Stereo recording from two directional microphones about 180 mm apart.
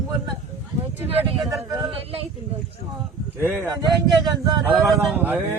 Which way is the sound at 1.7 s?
30° right (ahead or behind).